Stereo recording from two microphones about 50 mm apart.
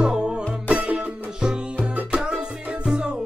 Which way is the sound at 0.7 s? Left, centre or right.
Right.